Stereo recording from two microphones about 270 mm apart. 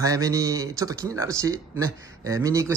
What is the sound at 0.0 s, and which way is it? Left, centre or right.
Speech, centre.